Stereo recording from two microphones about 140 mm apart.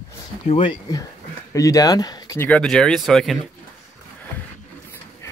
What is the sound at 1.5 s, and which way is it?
Speech, 25° left (ahead or behind).